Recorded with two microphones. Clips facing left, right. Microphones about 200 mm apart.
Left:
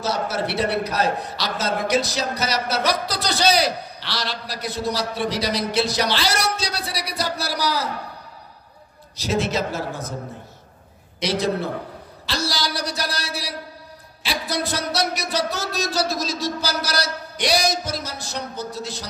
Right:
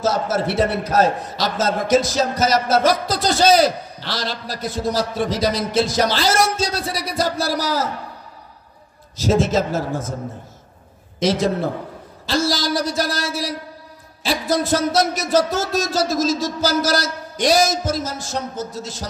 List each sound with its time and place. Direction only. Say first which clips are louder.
0.0 s a man's voice: right 4 dB; 45° right (ahead or behind)
9.2 s a man's voice: right 5 dB; 45° right (ahead or behind)
11.1 s a man's voice: right 4 dB; 45° right (ahead or behind)